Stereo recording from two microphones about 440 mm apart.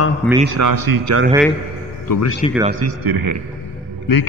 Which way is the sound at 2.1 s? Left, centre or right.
Left.